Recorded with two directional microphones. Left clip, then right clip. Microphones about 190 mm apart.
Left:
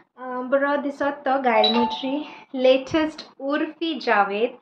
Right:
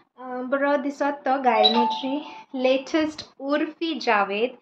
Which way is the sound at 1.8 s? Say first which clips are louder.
Even; 5° left (ahead or behind).